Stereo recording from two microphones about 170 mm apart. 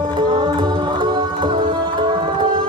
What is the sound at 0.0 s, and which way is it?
Music, 25° right (ahead or behind).